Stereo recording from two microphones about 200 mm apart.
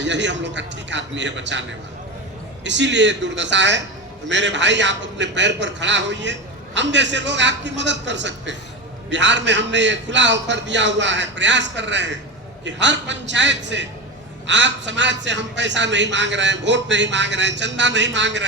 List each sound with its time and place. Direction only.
0.0 s a man's voice: 65° right (ahead or behind)
2.6 s a man's voice: 65° right (ahead or behind)